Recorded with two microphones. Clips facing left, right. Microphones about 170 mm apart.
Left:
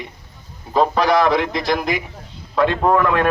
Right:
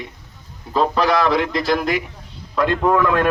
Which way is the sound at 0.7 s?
Centre (ahead or behind).